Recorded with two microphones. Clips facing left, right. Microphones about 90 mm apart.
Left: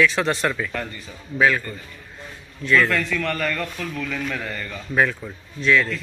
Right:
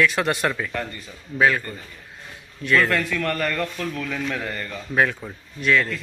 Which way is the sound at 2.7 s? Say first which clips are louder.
Left 1 dB; 15° right (ahead or behind).